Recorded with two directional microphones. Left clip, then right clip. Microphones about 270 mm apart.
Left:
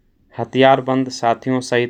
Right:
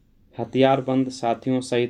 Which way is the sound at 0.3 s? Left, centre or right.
Left.